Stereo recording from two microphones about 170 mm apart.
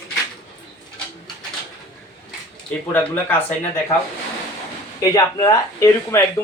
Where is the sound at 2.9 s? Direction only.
10° left (ahead or behind).